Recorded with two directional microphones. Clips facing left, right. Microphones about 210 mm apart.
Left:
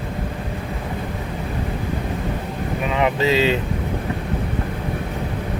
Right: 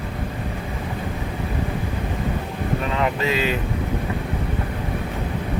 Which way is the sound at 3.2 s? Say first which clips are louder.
Left 4 dB; 30° left (ahead or behind).